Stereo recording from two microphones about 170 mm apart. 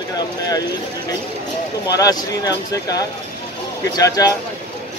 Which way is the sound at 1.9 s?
20° left (ahead or behind).